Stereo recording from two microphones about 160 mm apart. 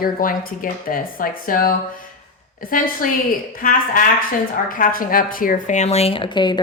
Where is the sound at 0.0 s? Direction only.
60° left (ahead or behind).